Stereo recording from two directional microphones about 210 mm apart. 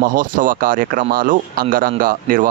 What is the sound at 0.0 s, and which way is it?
Speech, 40° right (ahead or behind).